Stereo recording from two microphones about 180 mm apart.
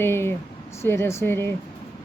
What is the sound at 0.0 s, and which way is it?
Speech, 15° left (ahead or behind).